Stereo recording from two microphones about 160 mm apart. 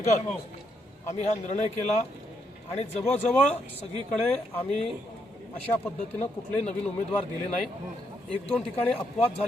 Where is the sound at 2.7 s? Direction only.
40° left (ahead or behind).